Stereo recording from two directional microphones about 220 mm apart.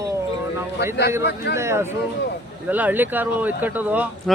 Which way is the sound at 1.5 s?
10° right (ahead or behind).